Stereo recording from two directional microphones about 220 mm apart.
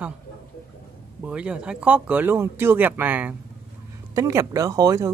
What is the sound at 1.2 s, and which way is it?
Speech, 5° right (ahead or behind).